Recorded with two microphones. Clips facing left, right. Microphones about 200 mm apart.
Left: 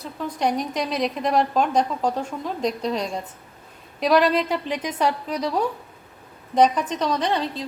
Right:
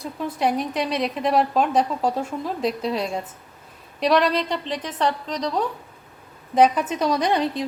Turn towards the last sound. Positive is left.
turn(degrees=-15)  # may be behind; listen again after turning